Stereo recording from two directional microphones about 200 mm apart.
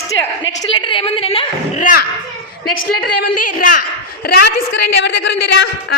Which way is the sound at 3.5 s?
40° left (ahead or behind).